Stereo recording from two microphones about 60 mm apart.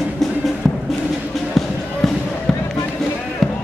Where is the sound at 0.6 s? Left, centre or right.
Centre.